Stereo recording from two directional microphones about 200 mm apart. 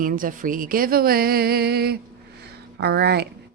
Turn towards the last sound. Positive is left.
turn(degrees=-55)  # may be behind; listen again after turning